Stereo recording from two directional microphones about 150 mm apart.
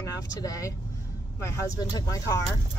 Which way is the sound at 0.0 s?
25° left (ahead or behind).